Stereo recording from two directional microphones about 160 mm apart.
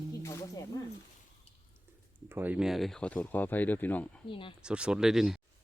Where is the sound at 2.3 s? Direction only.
10° right (ahead or behind); by 4.1 s 10° left (ahead or behind).